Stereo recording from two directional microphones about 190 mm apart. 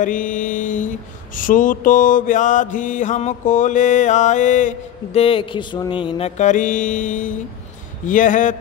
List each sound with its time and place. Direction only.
0.0 s mantra: 45° left (ahead or behind)